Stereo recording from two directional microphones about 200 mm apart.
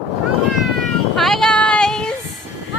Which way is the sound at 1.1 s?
Centre (ahead or behind).